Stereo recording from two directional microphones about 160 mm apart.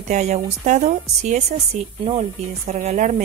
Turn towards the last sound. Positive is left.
turn(degrees=-50)  # may be behind; listen again after turning